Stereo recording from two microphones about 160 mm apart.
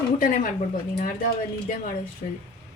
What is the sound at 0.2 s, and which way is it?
Speech, 60° left (ahead or behind).